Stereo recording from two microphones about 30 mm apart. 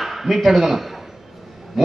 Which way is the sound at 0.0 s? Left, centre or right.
Centre.